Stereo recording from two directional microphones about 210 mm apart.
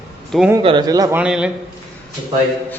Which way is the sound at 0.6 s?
20° right (ahead or behind).